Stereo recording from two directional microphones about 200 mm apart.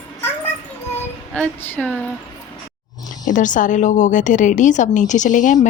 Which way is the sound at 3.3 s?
40° left (ahead or behind).